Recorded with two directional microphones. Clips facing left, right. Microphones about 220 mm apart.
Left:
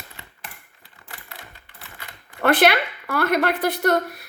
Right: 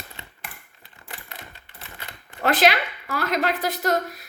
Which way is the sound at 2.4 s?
60° left (ahead or behind).